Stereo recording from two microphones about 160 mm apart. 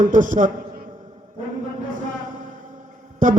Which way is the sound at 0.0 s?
55° right (ahead or behind).